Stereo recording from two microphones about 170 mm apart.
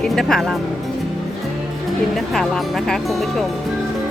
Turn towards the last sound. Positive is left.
turn(degrees=0)  # may be behind; listen again after turning